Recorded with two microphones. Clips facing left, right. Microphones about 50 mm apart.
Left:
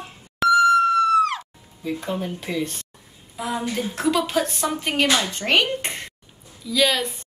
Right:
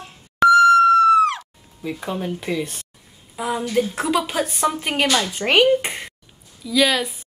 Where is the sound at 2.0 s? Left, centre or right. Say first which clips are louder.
Right 6 dB; centre.